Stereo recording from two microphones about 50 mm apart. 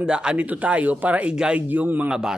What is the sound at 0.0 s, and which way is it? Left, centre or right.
A man's voice, centre.